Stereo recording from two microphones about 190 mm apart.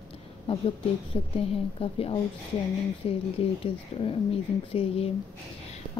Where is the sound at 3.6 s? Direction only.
30° left (ahead or behind).